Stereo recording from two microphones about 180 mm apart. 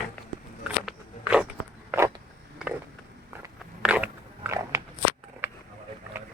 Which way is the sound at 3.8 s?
5° right (ahead or behind).